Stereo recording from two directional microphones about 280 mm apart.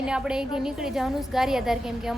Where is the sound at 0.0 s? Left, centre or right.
Centre.